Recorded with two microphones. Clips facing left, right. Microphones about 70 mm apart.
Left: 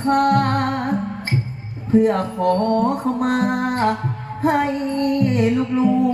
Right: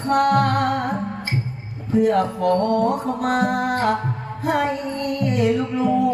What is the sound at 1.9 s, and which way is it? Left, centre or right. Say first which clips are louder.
Music: left 1 dB; left.